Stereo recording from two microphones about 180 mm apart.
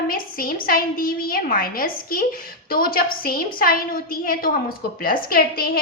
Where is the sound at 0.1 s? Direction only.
55° left (ahead or behind).